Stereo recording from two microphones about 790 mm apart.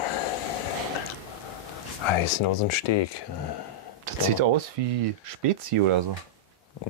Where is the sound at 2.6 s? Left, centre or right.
Left.